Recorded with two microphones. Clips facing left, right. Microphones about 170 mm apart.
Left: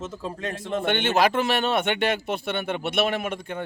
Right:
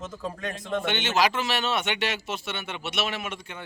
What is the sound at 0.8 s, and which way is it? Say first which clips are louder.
A man's voice: left 4 dB; 55° left (ahead or behind).